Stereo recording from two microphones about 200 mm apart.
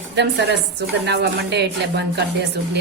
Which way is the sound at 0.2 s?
60° right (ahead or behind).